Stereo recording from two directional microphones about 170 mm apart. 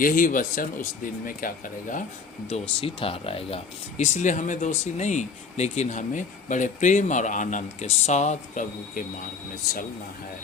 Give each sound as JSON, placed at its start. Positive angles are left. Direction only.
{"t": 0.0, "sound": "speech", "side_deg": 55}
{"t": 2.5, "sound": "speech", "side_deg": 35}